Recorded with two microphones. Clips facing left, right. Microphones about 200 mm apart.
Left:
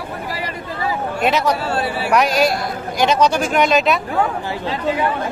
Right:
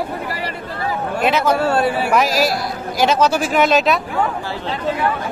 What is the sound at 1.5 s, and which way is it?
Speech, 50° right (ahead or behind).